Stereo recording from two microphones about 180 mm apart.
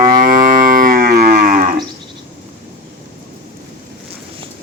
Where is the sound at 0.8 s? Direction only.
50° right (ahead or behind).